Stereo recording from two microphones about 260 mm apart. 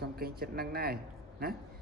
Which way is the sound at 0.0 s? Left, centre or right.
Right.